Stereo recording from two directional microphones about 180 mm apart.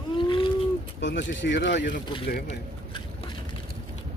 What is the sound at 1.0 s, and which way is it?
Speech, 85° left.